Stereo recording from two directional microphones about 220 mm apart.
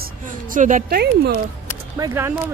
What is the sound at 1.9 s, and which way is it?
Speech, 15° right (ahead or behind).